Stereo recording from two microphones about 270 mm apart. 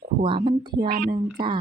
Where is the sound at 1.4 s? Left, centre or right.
Centre.